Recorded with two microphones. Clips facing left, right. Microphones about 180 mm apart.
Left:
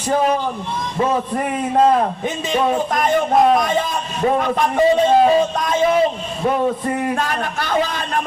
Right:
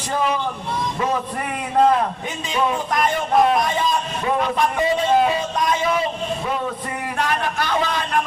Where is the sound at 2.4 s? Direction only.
50° left (ahead or behind).